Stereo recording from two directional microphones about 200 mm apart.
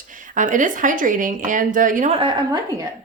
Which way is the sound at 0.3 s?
40° right (ahead or behind).